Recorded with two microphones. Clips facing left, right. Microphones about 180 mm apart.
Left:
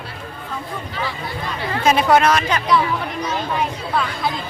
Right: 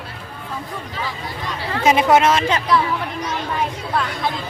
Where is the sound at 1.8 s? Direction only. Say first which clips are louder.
Right 1 dB; 20° right (ahead or behind).